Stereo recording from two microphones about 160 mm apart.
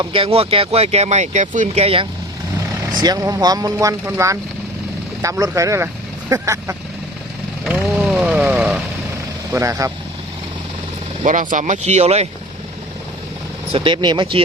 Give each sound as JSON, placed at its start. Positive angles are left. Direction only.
{"t": 0.0, "sound": "speech", "side_deg": -35}
{"t": 3.0, "sound": "speech", "side_deg": -25}
{"t": 7.6, "sound": "vehicle", "side_deg": 0}
{"t": 9.5, "sound": "speech", "side_deg": -20}
{"t": 11.2, "sound": "speech", "side_deg": -55}
{"t": 13.7, "sound": "speech", "side_deg": -30}